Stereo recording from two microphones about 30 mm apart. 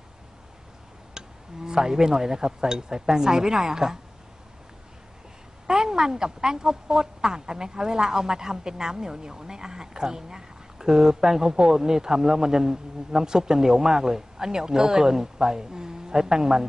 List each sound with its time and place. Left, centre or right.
1.1 s speech: right
5.7 s speech: right